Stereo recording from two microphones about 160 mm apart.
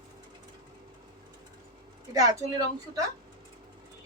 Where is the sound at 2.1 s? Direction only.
20° right (ahead or behind).